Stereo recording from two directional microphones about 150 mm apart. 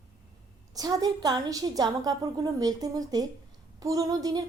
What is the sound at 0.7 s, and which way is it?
A woman's voice, 25° right (ahead or behind).